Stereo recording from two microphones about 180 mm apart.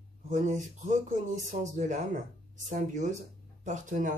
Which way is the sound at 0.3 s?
45° right (ahead or behind).